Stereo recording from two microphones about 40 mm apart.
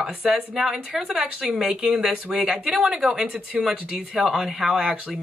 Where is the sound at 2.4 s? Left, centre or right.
Right.